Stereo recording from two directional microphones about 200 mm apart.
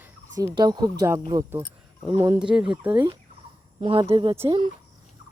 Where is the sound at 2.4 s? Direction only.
5° right (ahead or behind).